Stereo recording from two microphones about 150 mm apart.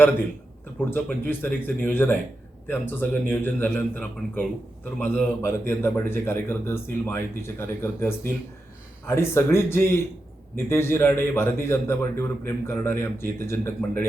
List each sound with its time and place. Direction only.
0.8 s a man's voice: 10° left (ahead or behind)